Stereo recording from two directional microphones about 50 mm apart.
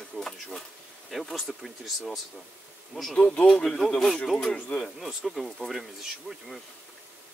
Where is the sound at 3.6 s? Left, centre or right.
Centre.